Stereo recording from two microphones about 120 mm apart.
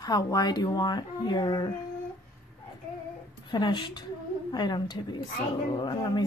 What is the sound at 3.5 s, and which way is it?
Speech, 40° left (ahead or behind).